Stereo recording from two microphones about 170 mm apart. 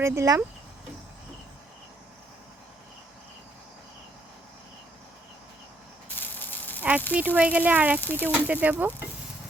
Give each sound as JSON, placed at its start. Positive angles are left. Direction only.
{"t": 0.0, "sound": "speech", "side_deg": -15}
{"t": 6.1, "sound": "spray", "side_deg": 10}
{"t": 7.1, "sound": "speech", "side_deg": -10}